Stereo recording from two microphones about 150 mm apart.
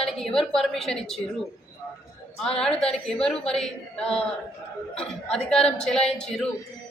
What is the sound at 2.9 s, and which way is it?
A woman's voice, 5° left (ahead or behind).